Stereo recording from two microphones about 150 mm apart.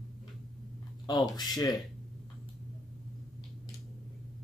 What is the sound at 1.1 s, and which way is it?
Speech, 25° left (ahead or behind).